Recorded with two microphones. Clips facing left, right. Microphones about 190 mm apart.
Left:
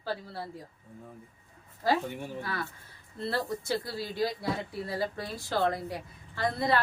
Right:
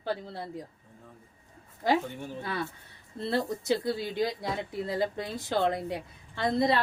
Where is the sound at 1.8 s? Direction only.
20° right (ahead or behind).